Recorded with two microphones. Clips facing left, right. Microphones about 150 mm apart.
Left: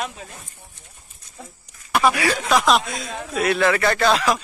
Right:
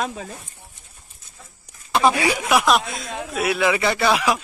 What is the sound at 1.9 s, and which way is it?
Speech, 25° right (ahead or behind).